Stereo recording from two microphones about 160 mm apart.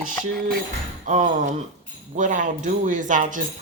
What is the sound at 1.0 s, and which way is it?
Speech, 50° right (ahead or behind).